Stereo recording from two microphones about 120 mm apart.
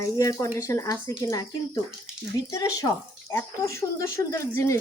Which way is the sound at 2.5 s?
30° left (ahead or behind).